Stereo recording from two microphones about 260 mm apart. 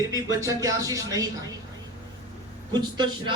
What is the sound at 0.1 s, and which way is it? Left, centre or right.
A man's voice, centre.